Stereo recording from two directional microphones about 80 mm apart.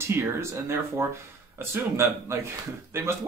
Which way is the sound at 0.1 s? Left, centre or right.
Right.